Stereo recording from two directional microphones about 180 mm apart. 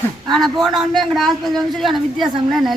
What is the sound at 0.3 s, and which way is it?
A man's voice, centre (ahead or behind).